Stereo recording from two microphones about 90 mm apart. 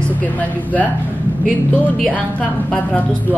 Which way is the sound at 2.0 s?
15° left (ahead or behind).